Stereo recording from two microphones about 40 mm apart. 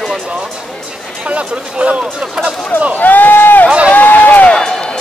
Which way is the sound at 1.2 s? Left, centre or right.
Right.